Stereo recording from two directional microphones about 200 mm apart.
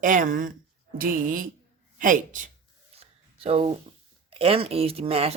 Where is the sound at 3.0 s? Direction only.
30° right (ahead or behind).